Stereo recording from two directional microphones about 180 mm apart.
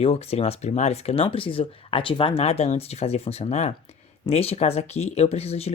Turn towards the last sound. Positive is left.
turn(degrees=35)  # may be behind; listen again after turning